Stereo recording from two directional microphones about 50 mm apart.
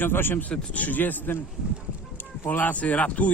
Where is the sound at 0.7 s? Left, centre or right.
Left.